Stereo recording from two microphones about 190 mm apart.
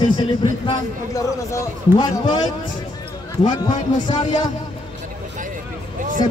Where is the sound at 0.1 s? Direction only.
25° left (ahead or behind).